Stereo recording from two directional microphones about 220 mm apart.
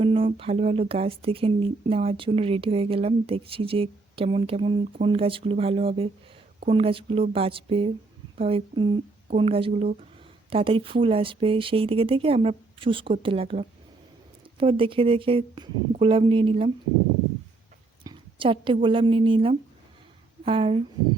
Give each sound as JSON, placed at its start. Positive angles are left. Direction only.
{"t": 0.0, "sound": "speech", "side_deg": -25}
{"t": 18.0, "sound": "a woman's voice", "side_deg": -20}